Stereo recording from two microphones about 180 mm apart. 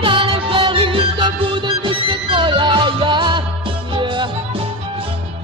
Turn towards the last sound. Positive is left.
turn(degrees=-25)  # may be behind; listen again after turning